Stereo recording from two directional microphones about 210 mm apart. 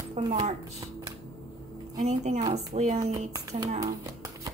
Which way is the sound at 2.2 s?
30° right (ahead or behind).